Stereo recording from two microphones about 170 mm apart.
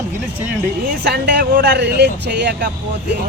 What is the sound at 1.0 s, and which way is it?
Speech, 65° right (ahead or behind).